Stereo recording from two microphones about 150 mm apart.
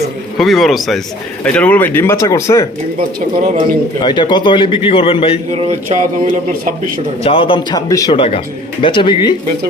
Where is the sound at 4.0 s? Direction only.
30° left (ahead or behind).